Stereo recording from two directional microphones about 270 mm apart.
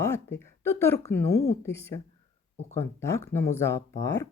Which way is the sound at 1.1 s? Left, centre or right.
Left.